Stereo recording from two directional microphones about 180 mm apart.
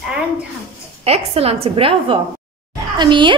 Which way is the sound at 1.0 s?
35° right (ahead or behind).